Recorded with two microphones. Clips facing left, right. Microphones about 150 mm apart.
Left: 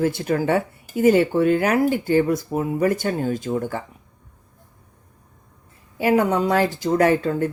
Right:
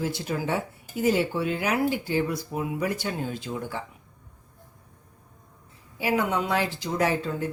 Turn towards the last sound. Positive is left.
turn(degrees=55)  # may be behind; listen again after turning